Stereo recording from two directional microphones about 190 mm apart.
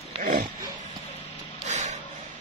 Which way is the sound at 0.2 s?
45° right (ahead or behind).